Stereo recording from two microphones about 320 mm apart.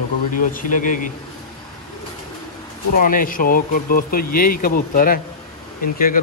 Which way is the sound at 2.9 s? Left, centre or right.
Left.